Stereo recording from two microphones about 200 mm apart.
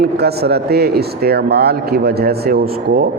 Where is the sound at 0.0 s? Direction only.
55° right (ahead or behind).